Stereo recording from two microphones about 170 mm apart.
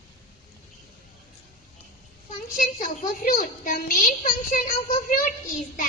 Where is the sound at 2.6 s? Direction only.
50° left (ahead or behind).